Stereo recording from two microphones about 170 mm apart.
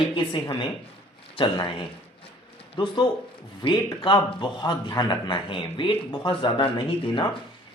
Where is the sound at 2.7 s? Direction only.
25° left (ahead or behind).